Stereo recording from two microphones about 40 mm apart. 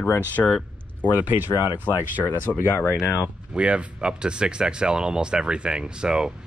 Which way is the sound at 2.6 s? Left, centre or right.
Left.